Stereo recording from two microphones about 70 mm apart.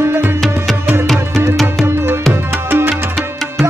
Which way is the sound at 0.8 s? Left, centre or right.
Right.